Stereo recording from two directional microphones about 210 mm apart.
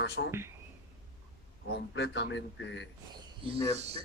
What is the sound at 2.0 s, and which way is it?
Speech, 55° left (ahead or behind).